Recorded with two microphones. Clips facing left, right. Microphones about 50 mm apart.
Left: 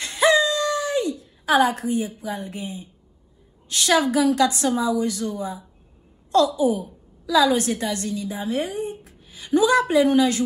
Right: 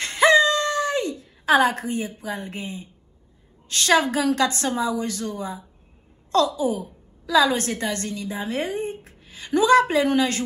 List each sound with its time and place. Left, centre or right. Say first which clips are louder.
0.0 s a sound: right 2 dB; right
3.6 s a woman's voice: even; right
6.6 s a woman's voice: left 3 dB; right